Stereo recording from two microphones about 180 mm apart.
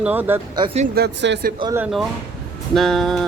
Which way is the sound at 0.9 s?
70° right (ahead or behind).